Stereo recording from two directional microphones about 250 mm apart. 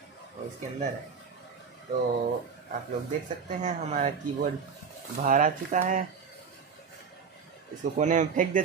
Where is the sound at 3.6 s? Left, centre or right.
Right.